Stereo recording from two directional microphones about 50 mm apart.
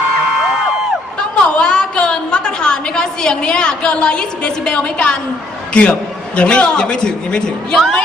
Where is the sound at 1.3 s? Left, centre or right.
Centre.